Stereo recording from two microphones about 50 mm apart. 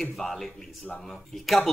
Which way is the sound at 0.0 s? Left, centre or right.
Centre.